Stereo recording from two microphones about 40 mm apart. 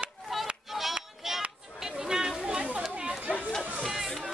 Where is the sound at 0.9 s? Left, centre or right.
Centre.